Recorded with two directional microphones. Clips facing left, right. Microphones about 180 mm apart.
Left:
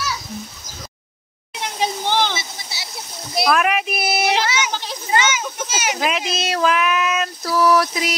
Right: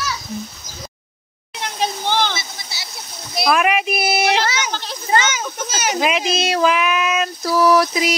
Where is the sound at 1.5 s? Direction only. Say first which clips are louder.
Even; 5° left (ahead or behind).